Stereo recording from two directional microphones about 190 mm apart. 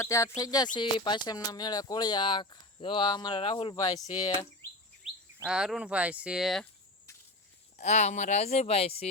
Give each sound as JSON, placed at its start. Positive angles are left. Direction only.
{"t": 0.0, "sound": "speech", "side_deg": 15}
{"t": 5.0, "sound": "chirp", "side_deg": 0}
{"t": 5.5, "sound": "speech", "side_deg": -5}
{"t": 7.8, "sound": "speech", "side_deg": 35}